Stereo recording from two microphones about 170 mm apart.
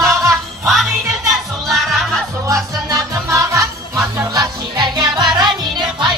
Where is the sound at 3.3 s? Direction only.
20° right (ahead or behind).